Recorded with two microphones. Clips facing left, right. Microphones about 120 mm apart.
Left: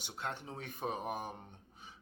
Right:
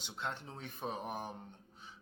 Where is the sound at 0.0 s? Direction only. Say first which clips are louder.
Even; 10° left (ahead or behind).